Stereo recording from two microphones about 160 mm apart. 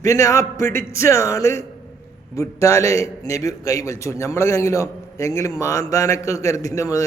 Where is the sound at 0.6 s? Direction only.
60° right (ahead or behind).